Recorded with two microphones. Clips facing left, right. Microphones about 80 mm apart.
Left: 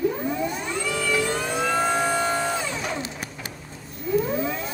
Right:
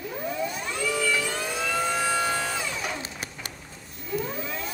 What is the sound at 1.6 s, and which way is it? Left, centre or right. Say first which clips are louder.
Music: left 4 dB; left.